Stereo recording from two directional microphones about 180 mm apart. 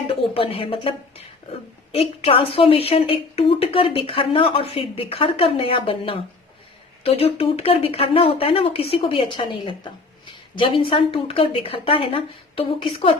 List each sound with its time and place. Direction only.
0.1 s a woman's voice: 30° left (ahead or behind)